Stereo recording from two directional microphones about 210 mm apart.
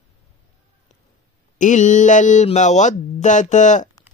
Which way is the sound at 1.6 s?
35° left (ahead or behind).